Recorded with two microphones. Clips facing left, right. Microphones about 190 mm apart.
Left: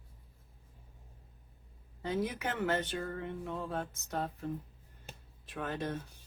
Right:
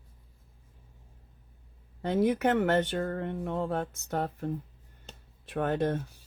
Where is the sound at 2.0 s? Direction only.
60° right (ahead or behind).